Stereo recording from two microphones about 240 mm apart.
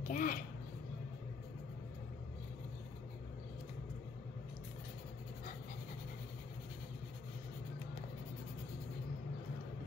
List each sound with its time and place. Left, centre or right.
0.1 s a child's voice: left